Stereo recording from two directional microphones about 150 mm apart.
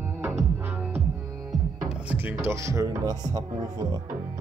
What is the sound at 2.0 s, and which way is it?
Speech, 10° right (ahead or behind).